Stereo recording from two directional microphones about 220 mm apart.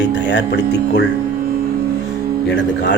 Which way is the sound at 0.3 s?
55° left (ahead or behind).